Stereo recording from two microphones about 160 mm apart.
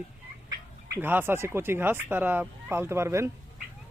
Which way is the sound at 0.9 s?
15° right (ahead or behind).